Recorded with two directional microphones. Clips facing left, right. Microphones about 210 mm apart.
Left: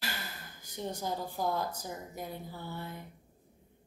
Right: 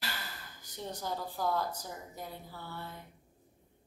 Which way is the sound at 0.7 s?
15° left (ahead or behind).